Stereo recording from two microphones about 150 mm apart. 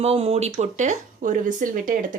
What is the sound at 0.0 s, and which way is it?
Speech, 40° right (ahead or behind).